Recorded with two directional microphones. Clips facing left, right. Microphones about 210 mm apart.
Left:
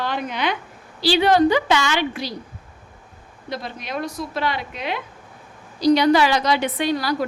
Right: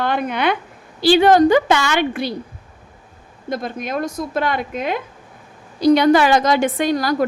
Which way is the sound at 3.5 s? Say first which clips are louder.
Right 6 dB; 50° right (ahead or behind).